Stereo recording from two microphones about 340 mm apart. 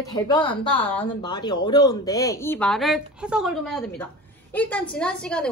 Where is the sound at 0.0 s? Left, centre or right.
Centre.